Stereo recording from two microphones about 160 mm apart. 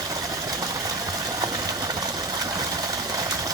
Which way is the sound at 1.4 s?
20° right (ahead or behind).